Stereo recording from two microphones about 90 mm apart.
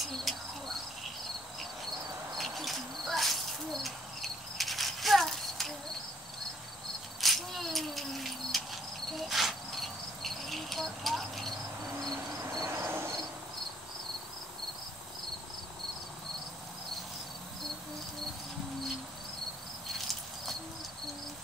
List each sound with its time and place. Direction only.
0.0 s cricket: centre (ahead or behind)
2.3 s cricket: centre (ahead or behind)
7.2 s a sound: centre (ahead or behind)
9.1 s cricket: centre (ahead or behind)
12.4 s cricket: 35° right (ahead or behind)